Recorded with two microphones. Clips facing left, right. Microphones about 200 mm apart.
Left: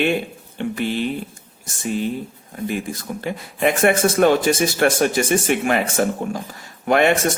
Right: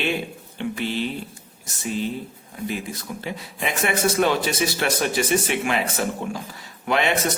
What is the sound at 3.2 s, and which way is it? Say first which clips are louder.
Speech: left 9 dB; 50° left (ahead or behind).